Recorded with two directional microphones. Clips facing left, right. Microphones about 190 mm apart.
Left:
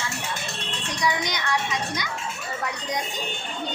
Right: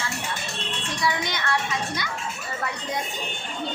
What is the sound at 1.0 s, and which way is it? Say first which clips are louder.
Music: left 1 dB; 15° left (ahead or behind).